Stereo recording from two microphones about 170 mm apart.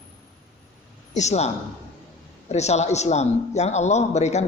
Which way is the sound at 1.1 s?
40° left (ahead or behind).